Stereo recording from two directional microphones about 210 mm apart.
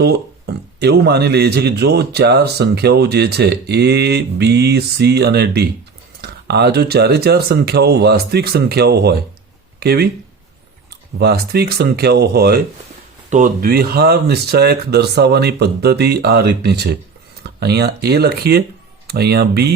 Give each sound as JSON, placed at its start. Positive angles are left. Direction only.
{"t": 0.0, "sound": "a man's voice", "side_deg": -50}
{"t": 11.2, "sound": "a man's voice", "side_deg": -50}